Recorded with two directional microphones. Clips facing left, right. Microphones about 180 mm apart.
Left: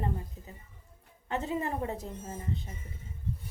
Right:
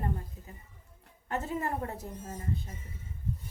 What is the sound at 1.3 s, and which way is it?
A woman's voice, 15° left (ahead or behind).